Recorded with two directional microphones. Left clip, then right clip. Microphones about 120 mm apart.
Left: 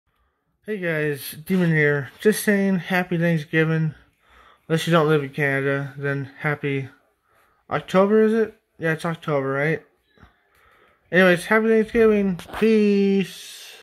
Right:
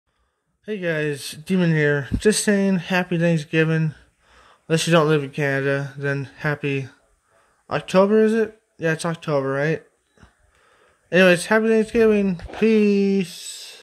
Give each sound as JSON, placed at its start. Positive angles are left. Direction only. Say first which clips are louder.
{"t": 0.7, "sound": "speech", "louder": "even", "side_deg": -15}
{"t": 11.1, "sound": "speech", "louder": "right 1 dB", "side_deg": -25}